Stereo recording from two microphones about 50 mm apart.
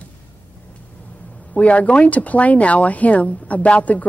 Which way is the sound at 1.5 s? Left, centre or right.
Left.